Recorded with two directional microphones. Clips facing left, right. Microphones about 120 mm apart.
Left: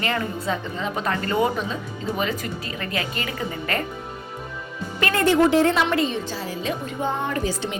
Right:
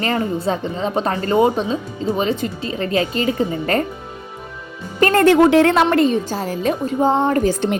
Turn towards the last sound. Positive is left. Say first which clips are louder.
# right 8 dB
turn(degrees=-50)  # may be behind; listen again after turning